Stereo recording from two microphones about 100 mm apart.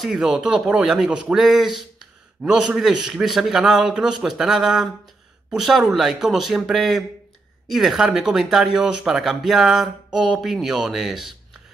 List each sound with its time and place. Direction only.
0.0 s speech: 5° right (ahead or behind)